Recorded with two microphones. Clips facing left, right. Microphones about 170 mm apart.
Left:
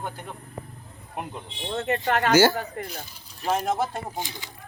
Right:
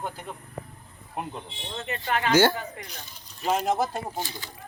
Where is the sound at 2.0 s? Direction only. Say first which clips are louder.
Left 1 dB; 45° left (ahead or behind).